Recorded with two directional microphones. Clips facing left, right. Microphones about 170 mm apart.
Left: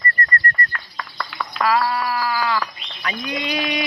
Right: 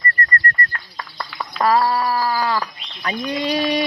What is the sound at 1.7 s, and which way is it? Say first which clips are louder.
Speech: right 3 dB; 35° right (ahead or behind).